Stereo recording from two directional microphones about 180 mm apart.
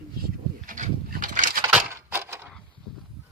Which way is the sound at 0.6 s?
45° right (ahead or behind).